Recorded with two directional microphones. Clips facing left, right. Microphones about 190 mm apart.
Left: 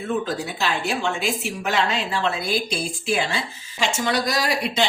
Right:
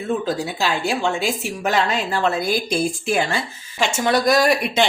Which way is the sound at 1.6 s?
40° right (ahead or behind).